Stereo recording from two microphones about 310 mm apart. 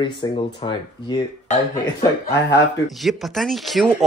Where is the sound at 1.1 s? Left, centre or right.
Centre.